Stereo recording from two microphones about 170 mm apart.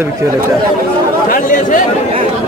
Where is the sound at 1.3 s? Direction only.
50° left (ahead or behind).